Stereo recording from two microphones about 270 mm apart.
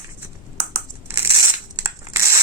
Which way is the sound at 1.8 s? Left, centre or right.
Centre.